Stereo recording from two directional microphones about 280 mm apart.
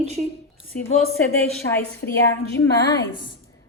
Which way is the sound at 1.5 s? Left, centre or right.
Centre.